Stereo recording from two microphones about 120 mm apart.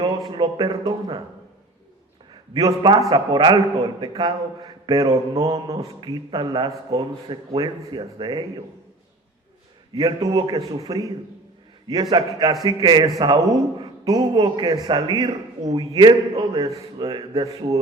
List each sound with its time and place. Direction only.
0.3 s a man's voice: 40° right (ahead or behind)
2.3 s a man's voice: 35° right (ahead or behind)
9.9 s a man's voice: 35° right (ahead or behind)
12.1 s a man's voice: 35° right (ahead or behind)